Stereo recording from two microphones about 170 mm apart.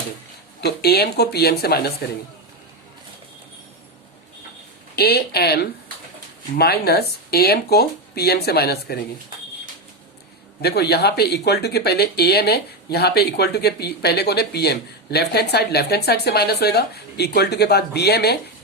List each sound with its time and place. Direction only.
0.6 s speech: 70° left (ahead or behind)
4.9 s speech: 70° left (ahead or behind)
10.6 s speech: 70° left (ahead or behind)